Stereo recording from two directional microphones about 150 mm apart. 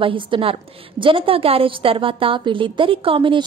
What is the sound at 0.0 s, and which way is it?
A woman's voice, 35° right (ahead or behind).